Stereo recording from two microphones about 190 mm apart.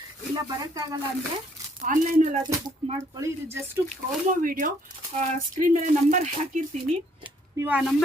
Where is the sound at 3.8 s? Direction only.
45° right (ahead or behind).